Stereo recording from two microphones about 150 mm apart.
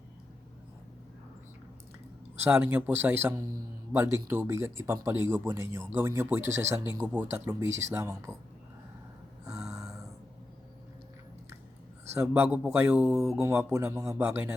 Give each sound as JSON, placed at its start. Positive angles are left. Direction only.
{"t": 2.4, "sound": "speech", "side_deg": -15}
{"t": 9.5, "sound": "a sound", "side_deg": -5}
{"t": 12.1, "sound": "speech", "side_deg": -15}
{"t": 13.4, "sound": "speech", "side_deg": -15}